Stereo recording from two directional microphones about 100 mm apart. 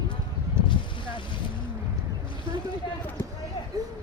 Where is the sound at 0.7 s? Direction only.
55° left (ahead or behind).